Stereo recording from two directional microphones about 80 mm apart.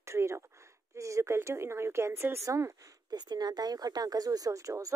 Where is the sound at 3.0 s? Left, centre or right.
Right.